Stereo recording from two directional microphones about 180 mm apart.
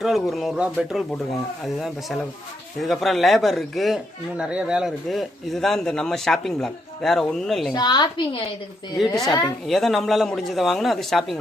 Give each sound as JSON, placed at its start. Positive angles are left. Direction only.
{"t": 0.0, "sound": "speech", "side_deg": 0}
{"t": 7.7, "sound": "a woman's voice", "side_deg": 25}
{"t": 9.6, "sound": "speech", "side_deg": 0}